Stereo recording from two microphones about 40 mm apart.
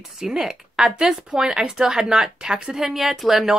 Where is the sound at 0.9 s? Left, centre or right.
Centre.